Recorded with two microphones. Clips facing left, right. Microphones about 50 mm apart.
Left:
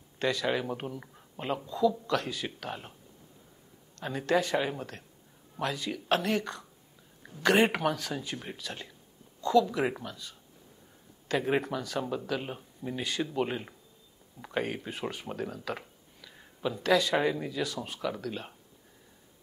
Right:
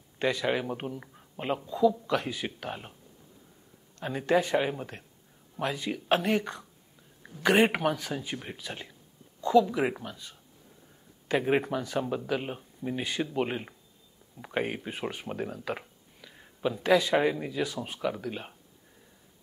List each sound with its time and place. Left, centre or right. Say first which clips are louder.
0.2 s speech: right 1 dB; centre
1.7 s speech: right 2 dB; centre
4.0 s speech: right 2 dB; centre
11.2 s speech: right 2 dB; centre
16.2 s a sound: right 3 dB; centre
16.8 s speech: right 2 dB; centre